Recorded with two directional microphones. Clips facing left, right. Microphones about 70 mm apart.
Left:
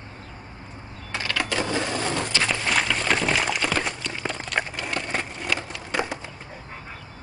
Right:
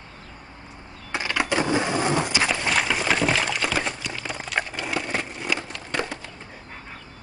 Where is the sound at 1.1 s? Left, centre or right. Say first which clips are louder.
Right 3 dB; centre.